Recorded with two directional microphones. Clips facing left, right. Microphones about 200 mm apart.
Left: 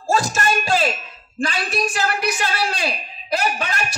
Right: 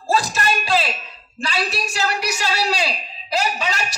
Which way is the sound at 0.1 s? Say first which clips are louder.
Left 1 dB; 45° left (ahead or behind).